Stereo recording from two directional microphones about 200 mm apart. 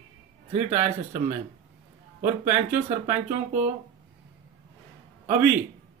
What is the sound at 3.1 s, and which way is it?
Speech, 35° right (ahead or behind).